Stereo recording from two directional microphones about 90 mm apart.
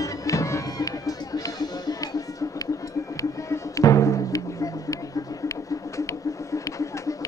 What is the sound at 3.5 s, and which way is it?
Music, 35° left (ahead or behind).